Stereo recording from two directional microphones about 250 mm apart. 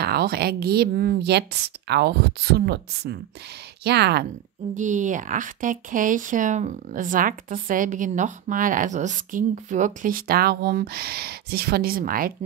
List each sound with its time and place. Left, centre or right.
0.0 s speech: right
4.7 s speech: right